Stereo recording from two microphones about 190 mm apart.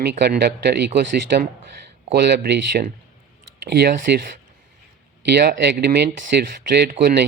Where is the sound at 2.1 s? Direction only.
60° right (ahead or behind).